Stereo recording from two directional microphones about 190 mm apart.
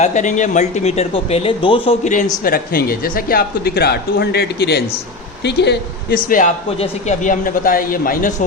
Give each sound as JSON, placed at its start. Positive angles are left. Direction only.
{"t": 0.0, "sound": "speech", "side_deg": 40}
{"t": 2.4, "sound": "speech", "side_deg": 50}
{"t": 6.2, "sound": "speech", "side_deg": 45}